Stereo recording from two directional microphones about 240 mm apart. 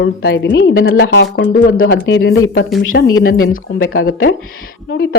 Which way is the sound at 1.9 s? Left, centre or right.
Left.